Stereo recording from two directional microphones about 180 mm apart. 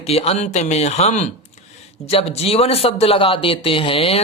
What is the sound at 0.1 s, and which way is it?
Speech, 35° left (ahead or behind).